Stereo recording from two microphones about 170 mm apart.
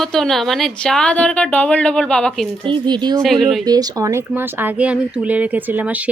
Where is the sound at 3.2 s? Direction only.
Centre (ahead or behind).